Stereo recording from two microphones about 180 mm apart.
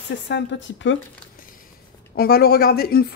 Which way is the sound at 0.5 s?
90° left.